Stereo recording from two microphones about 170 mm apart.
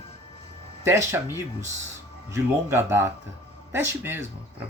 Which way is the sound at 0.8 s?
15° right (ahead or behind).